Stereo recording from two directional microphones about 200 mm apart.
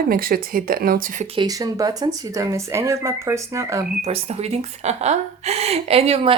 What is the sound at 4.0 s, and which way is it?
Speech, 30° right (ahead or behind).